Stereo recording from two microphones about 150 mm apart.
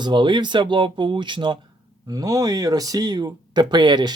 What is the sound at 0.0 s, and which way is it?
Speech, 30° right (ahead or behind).